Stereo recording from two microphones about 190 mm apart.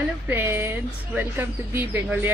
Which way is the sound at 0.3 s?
10° right (ahead or behind).